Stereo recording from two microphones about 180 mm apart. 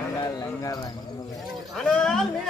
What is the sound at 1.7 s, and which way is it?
Speech, 5° left (ahead or behind).